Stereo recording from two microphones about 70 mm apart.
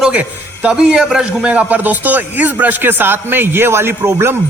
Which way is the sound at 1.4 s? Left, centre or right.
Centre.